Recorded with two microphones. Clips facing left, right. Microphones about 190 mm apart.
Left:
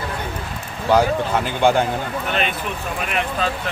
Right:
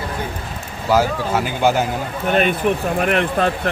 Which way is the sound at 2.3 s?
50° right (ahead or behind).